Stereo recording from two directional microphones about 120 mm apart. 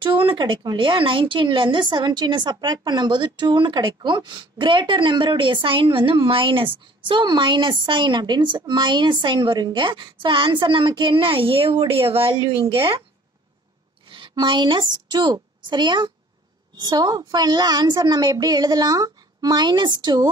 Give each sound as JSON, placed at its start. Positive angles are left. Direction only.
{"t": 0.0, "sound": "speech", "side_deg": -45}
{"t": 14.0, "sound": "a woman's voice", "side_deg": -45}